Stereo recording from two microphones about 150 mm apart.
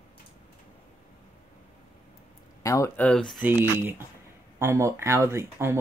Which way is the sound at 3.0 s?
5° left (ahead or behind).